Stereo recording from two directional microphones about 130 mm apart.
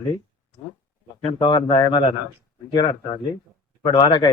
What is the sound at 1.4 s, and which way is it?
Speech, 40° left (ahead or behind).